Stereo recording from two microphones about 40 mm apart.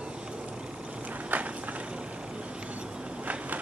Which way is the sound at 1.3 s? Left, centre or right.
Right.